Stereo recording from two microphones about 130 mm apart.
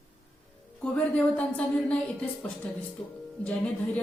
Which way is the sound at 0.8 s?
10° left (ahead or behind).